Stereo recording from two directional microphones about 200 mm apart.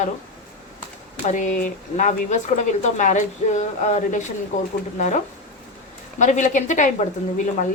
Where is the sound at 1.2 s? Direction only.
40° left (ahead or behind).